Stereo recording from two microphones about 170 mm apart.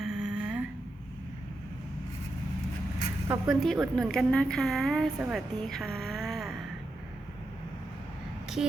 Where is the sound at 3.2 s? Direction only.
20° right (ahead or behind).